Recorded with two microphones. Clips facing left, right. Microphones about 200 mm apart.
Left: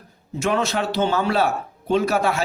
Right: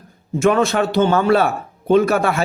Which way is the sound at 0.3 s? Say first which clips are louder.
Right 6 dB; 50° right (ahead or behind).